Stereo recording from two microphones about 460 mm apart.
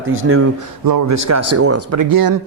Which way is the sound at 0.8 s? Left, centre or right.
Right.